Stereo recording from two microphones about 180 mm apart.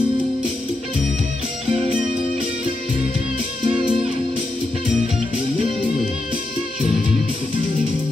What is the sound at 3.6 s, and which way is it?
Music, 30° right (ahead or behind).